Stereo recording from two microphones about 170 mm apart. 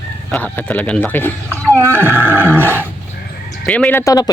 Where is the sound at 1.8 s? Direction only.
15° right (ahead or behind).